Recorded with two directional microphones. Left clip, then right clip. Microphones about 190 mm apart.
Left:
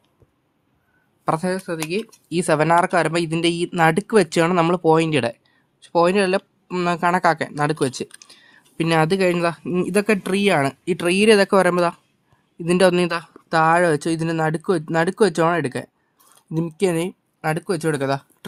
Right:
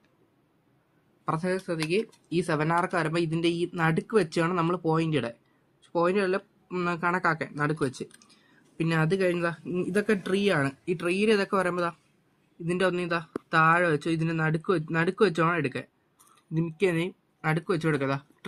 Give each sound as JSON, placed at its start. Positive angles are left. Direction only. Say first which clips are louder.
{"t": 1.2, "sound": "speech", "louder": "left 7 dB", "side_deg": 60}